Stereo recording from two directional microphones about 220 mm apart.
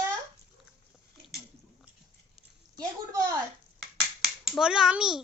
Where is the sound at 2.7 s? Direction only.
15° right (ahead or behind).